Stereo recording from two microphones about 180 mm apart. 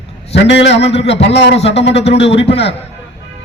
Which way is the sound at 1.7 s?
75° left (ahead or behind).